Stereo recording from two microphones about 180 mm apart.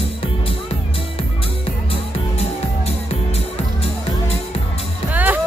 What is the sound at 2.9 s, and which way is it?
Music, 35° left (ahead or behind).